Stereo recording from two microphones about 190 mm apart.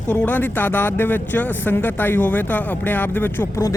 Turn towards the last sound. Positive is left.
turn(degrees=15)  # may be behind; listen again after turning